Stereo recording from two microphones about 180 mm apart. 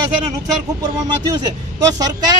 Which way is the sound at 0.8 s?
20° right (ahead or behind).